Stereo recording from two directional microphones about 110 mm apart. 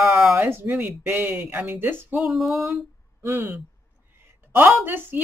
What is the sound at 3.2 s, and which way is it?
Speech, 25° right (ahead or behind).